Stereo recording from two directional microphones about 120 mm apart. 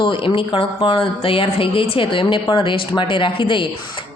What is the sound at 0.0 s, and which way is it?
Speech, 45° left (ahead or behind).